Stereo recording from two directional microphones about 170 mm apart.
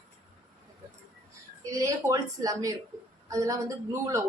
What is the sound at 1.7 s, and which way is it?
Speech, 20° right (ahead or behind).